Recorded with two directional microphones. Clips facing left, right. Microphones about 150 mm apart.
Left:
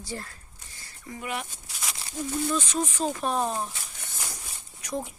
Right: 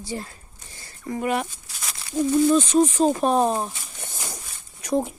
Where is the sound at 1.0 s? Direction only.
50° right (ahead or behind).